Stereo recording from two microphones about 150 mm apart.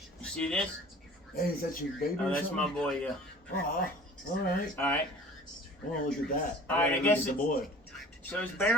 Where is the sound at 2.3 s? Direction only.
10° left (ahead or behind).